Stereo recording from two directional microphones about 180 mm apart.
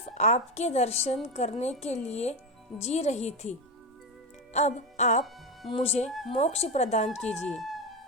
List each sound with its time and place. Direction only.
0.0 s a woman's voice: 35° left (ahead or behind)
4.5 s a woman's voice: 40° left (ahead or behind)
7.4 s speech: centre (ahead or behind)